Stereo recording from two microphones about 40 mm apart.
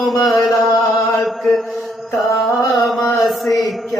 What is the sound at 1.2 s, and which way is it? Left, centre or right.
Mantra, centre.